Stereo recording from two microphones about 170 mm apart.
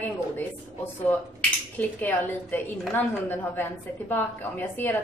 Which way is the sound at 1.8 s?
10° left (ahead or behind).